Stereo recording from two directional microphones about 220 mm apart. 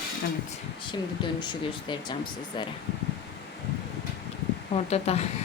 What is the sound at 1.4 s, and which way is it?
Speech, 20° left (ahead or behind).